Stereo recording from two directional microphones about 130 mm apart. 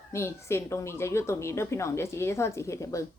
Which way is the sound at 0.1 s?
20° left (ahead or behind).